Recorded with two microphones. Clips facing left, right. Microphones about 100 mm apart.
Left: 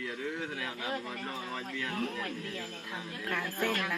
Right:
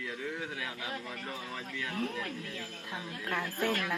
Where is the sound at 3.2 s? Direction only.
15° right (ahead or behind).